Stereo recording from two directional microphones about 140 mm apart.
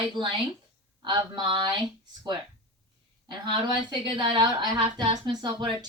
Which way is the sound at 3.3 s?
30° right (ahead or behind).